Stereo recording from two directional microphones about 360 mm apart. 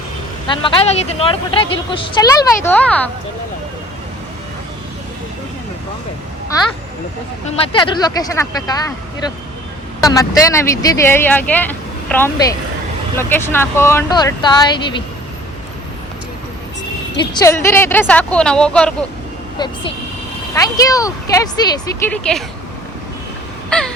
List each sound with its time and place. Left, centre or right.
0.4 s speech: centre
6.5 s speech: centre
10.0 s speech: centre
17.3 s speech: centre
23.6 s a sound: centre